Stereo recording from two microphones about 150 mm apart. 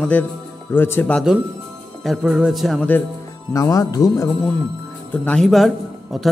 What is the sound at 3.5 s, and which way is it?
Speech, 25° left (ahead or behind).